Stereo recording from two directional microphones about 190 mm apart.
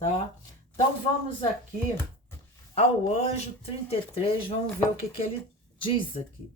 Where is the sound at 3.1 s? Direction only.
35° left (ahead or behind).